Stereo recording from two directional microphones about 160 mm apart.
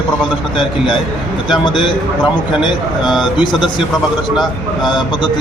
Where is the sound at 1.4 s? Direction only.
30° left (ahead or behind).